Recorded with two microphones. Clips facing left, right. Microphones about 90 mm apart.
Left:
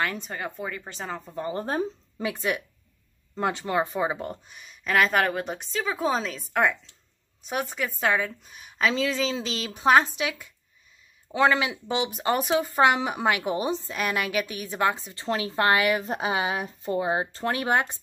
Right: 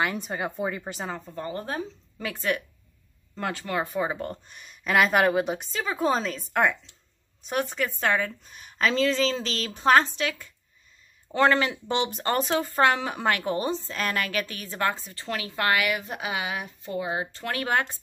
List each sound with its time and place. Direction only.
0.0 s a woman's voice: 10° right (ahead or behind)
1.3 s speech: 15° left (ahead or behind)
1.6 s speech: 35° left (ahead or behind)
2.1 s speech: 15° left (ahead or behind)
4.1 s speech: 10° left (ahead or behind)
4.6 s a woman's voice: centre (ahead or behind); by 17.5 s 35° left (ahead or behind)
17.5 s speech: 20° left (ahead or behind)